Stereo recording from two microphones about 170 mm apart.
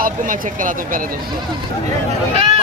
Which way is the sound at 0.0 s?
55° right (ahead or behind).